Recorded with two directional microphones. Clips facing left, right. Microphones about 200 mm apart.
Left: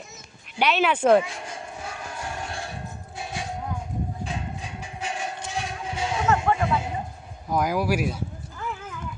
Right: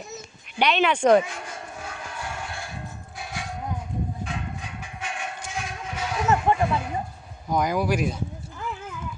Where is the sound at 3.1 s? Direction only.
25° left (ahead or behind).